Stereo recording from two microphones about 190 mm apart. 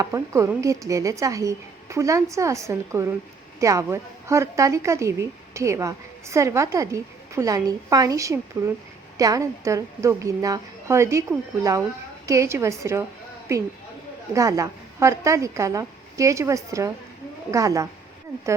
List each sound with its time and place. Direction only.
0.0 s speech: 15° right (ahead or behind)